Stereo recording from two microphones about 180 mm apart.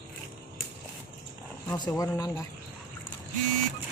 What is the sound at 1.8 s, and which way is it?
Speech, 20° left (ahead or behind).